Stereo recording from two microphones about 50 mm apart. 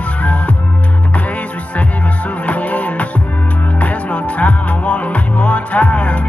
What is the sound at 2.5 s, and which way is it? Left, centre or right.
Music, left.